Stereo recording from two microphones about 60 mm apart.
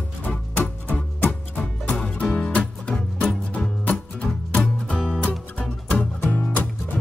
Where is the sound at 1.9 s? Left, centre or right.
Centre.